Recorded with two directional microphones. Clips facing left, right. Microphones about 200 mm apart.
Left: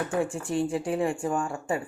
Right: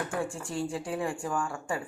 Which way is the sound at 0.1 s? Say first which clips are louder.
Left 6 dB; 20° left (ahead or behind).